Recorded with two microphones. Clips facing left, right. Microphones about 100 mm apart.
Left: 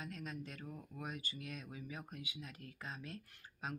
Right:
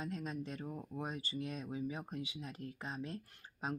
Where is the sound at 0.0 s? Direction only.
25° right (ahead or behind).